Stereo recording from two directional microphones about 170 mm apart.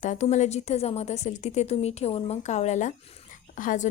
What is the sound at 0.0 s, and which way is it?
A woman's voice, 45° left (ahead or behind).